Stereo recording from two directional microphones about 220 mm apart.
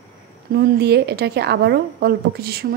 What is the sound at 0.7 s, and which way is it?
A woman's voice, 50° right (ahead or behind).